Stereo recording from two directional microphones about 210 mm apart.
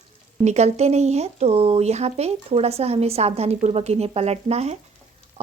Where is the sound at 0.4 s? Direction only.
30° right (ahead or behind).